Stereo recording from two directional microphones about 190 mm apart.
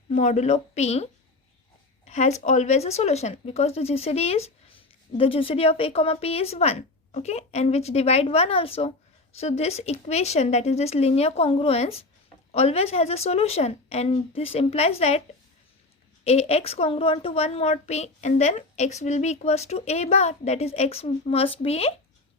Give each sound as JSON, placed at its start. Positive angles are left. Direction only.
{"t": 0.1, "sound": "speech", "side_deg": 35}
{"t": 2.0, "sound": "speech", "side_deg": 35}
{"t": 16.2, "sound": "speech", "side_deg": 35}